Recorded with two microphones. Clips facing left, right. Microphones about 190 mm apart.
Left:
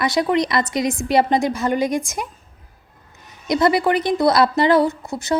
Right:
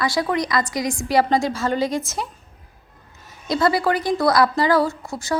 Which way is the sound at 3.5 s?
20° left (ahead or behind).